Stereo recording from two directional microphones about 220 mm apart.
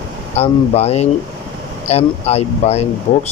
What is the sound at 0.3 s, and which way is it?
Speech, 30° left (ahead or behind).